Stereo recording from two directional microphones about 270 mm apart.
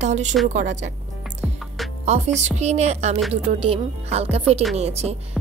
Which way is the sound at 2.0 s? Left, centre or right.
Right.